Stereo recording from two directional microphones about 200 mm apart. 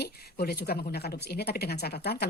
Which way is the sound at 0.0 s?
50° left (ahead or behind).